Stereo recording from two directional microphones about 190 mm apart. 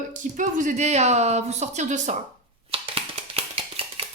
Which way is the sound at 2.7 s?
30° right (ahead or behind).